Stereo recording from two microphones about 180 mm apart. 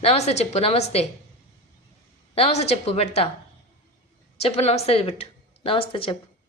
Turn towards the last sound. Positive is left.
turn(degrees=30)  # may be behind; listen again after turning